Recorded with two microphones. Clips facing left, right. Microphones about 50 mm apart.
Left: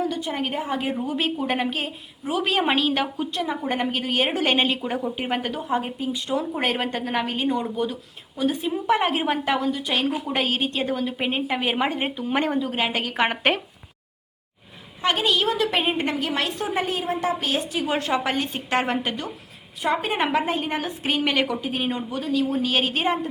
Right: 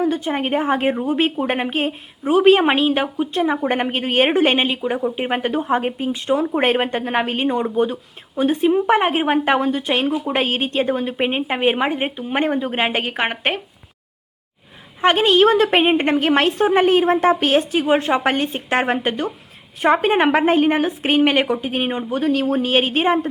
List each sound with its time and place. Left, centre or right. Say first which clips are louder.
0.0 s a woman's voice: right 6 dB; right
5.4 s a woman's voice: right 6 dB; right
11.8 s speech: right 4 dB; centre
12.2 s a woman's voice: right 2 dB; right
15.0 s a woman's voice: right 8 dB; right
19.8 s a woman's voice: right 8 dB; right
20.4 s a woman's voice: right 10 dB; right
20.7 s a woman's voice: right 8 dB; right
22.6 s a woman's voice: right 5 dB; right